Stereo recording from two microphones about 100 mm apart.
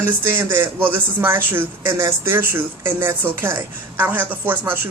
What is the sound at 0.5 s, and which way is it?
Speech, 20° right (ahead or behind).